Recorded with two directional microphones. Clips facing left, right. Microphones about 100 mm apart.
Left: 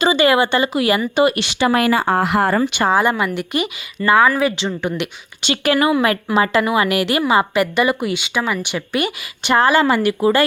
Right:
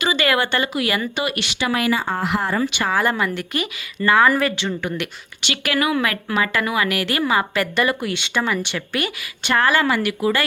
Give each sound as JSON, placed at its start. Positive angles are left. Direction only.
{"t": 0.0, "sound": "a woman's voice", "side_deg": 25}
{"t": 1.7, "sound": "speech", "side_deg": 55}
{"t": 2.8, "sound": "a woman's voice", "side_deg": 20}
{"t": 4.5, "sound": "a woman's voice", "side_deg": 25}